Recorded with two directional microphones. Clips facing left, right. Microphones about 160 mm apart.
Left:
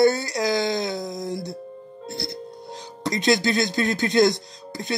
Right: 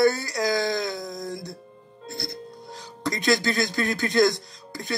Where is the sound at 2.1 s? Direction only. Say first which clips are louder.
Left 2 dB; 25° left (ahead or behind).